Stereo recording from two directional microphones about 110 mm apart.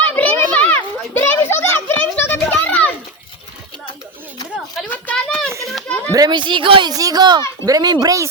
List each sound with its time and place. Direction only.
0.0 s children playing: 15° left (ahead or behind)
4.9 s a sound: 15° left (ahead or behind)
6.1 s speech: 35° right (ahead or behind)
6.9 s speech: 35° right (ahead or behind)